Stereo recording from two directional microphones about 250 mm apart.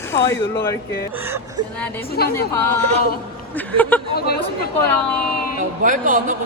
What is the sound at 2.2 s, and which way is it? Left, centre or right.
Speech, left.